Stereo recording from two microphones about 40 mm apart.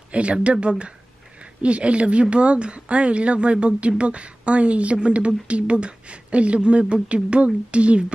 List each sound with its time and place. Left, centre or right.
0.1 s speech: right